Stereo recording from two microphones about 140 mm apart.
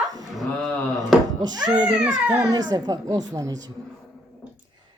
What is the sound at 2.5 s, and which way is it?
Speech, 25° right (ahead or behind).